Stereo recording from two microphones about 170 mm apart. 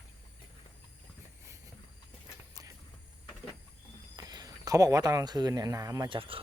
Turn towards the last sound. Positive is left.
turn(degrees=-30)  # may be behind; listen again after turning